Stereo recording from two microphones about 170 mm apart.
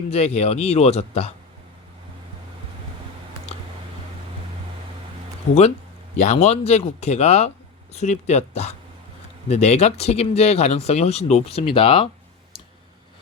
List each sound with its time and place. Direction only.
0.1 s speech: 40° left (ahead or behind)
6.1 s speech: 45° left (ahead or behind)
12.5 s clicking: 35° left (ahead or behind)